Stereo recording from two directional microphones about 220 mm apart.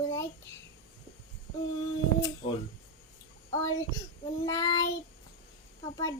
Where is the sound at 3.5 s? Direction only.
15° left (ahead or behind).